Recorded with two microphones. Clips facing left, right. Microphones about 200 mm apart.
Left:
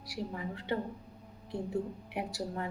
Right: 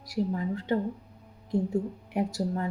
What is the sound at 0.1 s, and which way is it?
Speech, 45° right (ahead or behind).